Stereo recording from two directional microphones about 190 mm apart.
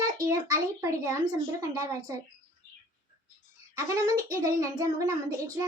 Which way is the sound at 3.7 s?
15° right (ahead or behind).